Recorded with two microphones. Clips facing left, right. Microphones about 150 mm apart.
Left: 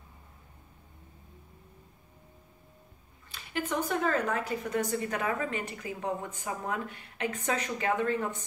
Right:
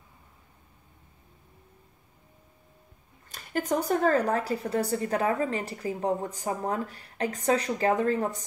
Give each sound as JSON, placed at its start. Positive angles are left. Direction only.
{"t": 3.3, "sound": "a woman's voice", "side_deg": -45}